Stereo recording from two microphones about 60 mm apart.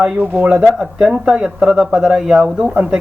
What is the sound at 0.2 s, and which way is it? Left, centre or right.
Speech, right.